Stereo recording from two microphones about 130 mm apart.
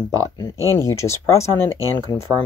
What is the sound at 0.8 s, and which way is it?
Speech, 20° left (ahead or behind).